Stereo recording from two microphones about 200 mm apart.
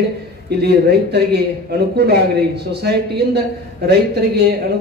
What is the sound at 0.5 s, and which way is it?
A man's voice, 55° right (ahead or behind).